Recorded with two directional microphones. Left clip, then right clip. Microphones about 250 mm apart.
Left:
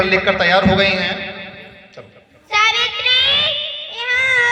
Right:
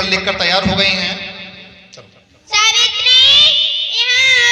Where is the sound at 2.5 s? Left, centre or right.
Left.